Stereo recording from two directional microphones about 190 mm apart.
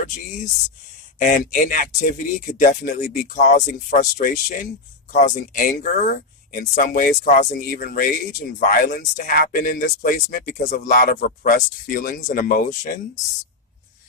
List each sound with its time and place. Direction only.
1.2 s speech: 45° left (ahead or behind)